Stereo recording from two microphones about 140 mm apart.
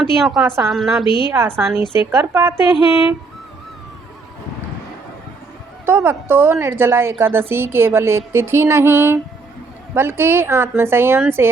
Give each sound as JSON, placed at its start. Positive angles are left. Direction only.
{"t": 0.2, "sound": "a woman's voice", "side_deg": 0}
{"t": 1.0, "sound": "a woman's voice", "side_deg": 35}
{"t": 1.3, "sound": "speech", "side_deg": -15}
{"t": 1.8, "sound": "a woman's voice", "side_deg": 35}
{"t": 2.1, "sound": "speech", "side_deg": -15}
{"t": 5.8, "sound": "speech", "side_deg": -15}